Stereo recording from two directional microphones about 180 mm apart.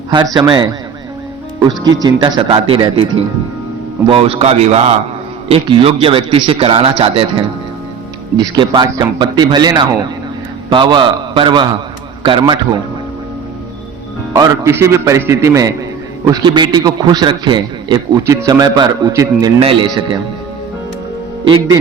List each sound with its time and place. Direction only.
0.1 s a man's voice: 25° right (ahead or behind)
8.5 s a man's voice: 25° right (ahead or behind)
14.3 s a man's voice: 15° right (ahead or behind)
19.5 s a man's voice: 30° right (ahead or behind)
21.4 s a man's voice: 30° right (ahead or behind)